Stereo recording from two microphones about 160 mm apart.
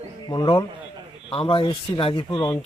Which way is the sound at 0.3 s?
30° left (ahead or behind).